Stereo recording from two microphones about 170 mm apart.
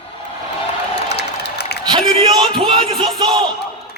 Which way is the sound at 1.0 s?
75° left (ahead or behind).